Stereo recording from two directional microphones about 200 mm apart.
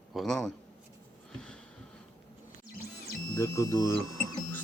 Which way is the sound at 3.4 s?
15° left (ahead or behind).